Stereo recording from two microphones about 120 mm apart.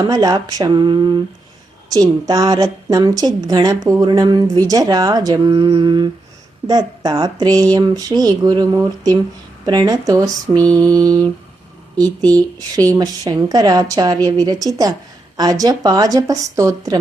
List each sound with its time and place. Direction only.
0.0 s speech: 30° right (ahead or behind)